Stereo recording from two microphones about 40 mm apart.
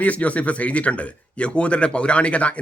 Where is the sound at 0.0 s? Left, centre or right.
Left.